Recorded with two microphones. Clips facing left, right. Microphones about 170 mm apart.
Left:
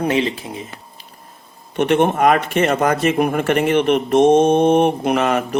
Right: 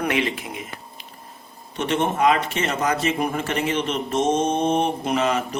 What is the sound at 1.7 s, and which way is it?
Speech, 60° left (ahead or behind).